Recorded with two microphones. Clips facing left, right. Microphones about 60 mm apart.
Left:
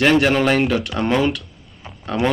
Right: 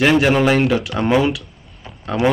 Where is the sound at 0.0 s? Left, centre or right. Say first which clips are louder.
Right 1 dB; centre.